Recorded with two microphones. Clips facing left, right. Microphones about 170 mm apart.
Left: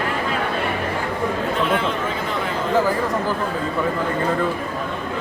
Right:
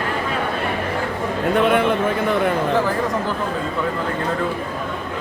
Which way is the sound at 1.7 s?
60° right (ahead or behind).